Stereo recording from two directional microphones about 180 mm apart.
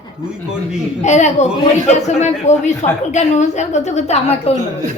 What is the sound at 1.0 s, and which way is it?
A woman's voice, 40° left (ahead or behind).